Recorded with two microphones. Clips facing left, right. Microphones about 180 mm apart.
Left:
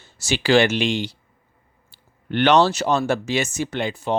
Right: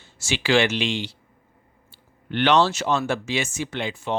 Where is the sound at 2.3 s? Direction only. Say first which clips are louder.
Left 3 dB; 45° left (ahead or behind).